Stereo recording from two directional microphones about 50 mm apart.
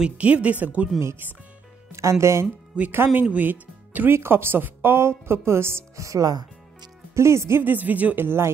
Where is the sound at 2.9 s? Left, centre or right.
Right.